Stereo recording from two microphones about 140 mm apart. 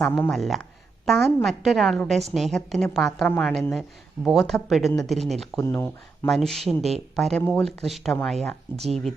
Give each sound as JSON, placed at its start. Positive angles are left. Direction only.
{"t": 0.3, "sound": "speech", "side_deg": 0}
{"t": 5.5, "sound": "speech", "side_deg": 20}
{"t": 6.2, "sound": "speech", "side_deg": 0}